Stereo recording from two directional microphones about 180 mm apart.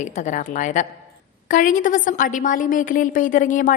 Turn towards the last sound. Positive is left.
turn(degrees=50)  # may be behind; listen again after turning